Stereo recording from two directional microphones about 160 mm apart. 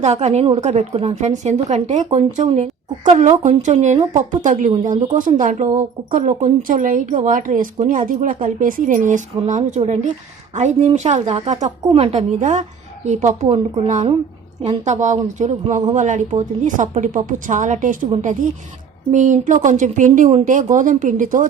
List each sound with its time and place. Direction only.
0.0 s a woman's voice: 45° right (ahead or behind)